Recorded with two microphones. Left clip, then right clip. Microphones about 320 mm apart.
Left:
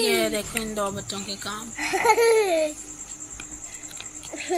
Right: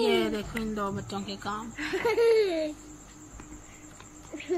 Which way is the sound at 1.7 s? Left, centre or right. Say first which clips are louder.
Left 8 dB; centre.